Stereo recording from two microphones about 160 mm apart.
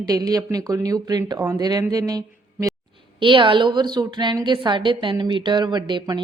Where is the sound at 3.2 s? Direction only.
30° right (ahead or behind).